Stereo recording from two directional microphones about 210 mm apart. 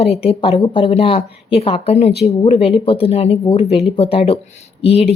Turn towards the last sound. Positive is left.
turn(degrees=30)  # may be behind; listen again after turning